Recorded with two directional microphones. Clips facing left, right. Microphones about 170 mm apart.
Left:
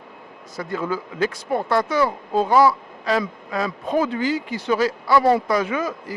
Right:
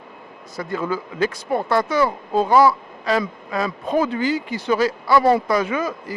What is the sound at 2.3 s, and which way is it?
Speech, 15° right (ahead or behind).